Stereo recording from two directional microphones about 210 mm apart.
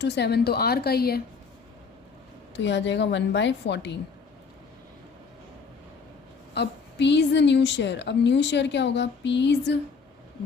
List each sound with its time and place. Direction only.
0.0 s a woman's voice: 55° left (ahead or behind)
2.6 s a woman's voice: 60° left (ahead or behind)
6.5 s a woman's voice: 55° left (ahead or behind)